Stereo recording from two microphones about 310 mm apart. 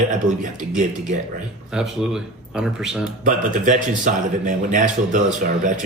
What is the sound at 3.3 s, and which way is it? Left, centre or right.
A man's voice, right.